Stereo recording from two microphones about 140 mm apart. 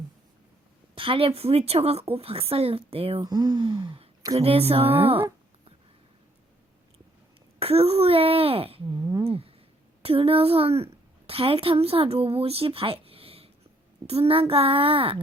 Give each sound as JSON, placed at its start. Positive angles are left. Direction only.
{"t": 0.9, "sound": "a woman's voice", "side_deg": -40}
{"t": 3.2, "sound": "speech", "side_deg": -30}
{"t": 4.4, "sound": "a woman's voice", "side_deg": -45}
{"t": 7.6, "sound": "a woman's voice", "side_deg": -45}
{"t": 9.2, "sound": "a woman's voice", "side_deg": -45}